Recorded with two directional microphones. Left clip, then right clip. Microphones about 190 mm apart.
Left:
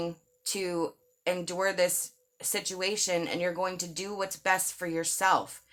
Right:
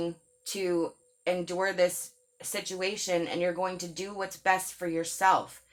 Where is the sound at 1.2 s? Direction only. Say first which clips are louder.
Even; 45° left (ahead or behind).